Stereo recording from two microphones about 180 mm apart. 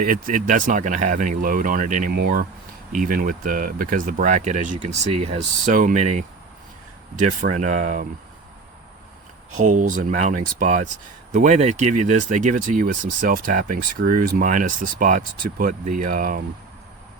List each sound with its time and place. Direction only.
0.0 s speech: 50° right (ahead or behind)
9.6 s speech: 45° right (ahead or behind)